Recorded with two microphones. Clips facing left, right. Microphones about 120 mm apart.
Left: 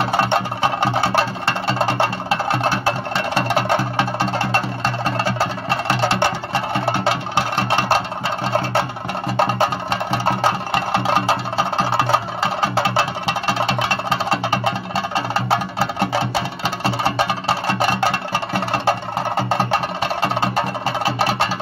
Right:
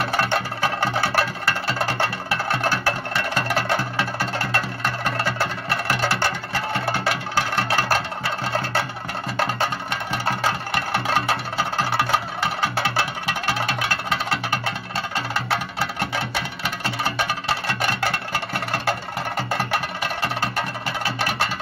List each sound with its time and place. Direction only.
0.0 s music: 25° left (ahead or behind)
9.4 s music: 30° left (ahead or behind)